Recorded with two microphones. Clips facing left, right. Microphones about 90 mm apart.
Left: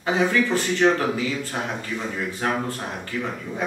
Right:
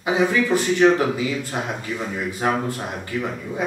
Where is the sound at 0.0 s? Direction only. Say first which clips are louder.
Right 1 dB; 15° right (ahead or behind).